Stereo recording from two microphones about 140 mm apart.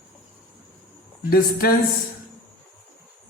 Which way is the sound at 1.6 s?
90° left.